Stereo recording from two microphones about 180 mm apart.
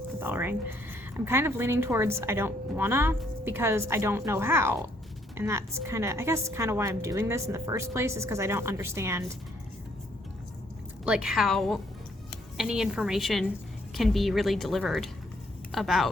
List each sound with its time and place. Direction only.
0.2 s a woman's voice: 10° right (ahead or behind)
11.0 s a woman's voice: 5° right (ahead or behind)